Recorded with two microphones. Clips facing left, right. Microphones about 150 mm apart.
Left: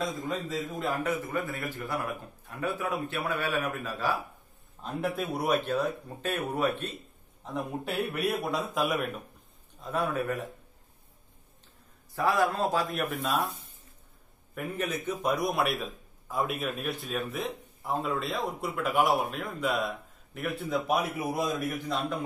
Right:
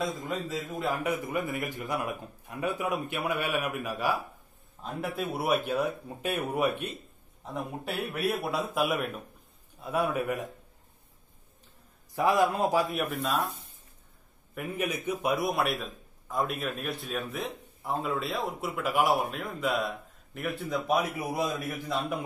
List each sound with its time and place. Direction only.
0.0 s a man's voice: 10° right (ahead or behind)
4.8 s a man's voice: centre (ahead or behind)
7.5 s a man's voice: centre (ahead or behind)
12.2 s a man's voice: 20° right (ahead or behind)
12.9 s a man's voice: centre (ahead or behind)
14.5 s a man's voice: 5° right (ahead or behind)